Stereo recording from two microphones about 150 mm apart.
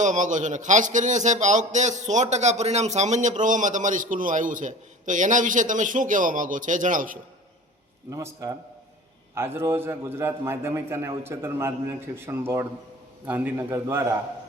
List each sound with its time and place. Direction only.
0.0 s a man's voice: 55° right (ahead or behind)
8.1 s a man's voice: 20° right (ahead or behind)